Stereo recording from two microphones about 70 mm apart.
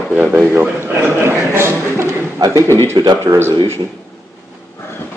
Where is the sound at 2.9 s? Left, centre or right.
Right.